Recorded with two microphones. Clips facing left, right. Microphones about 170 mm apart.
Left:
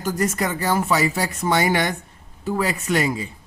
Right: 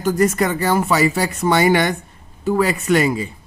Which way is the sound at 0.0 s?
60° right (ahead or behind).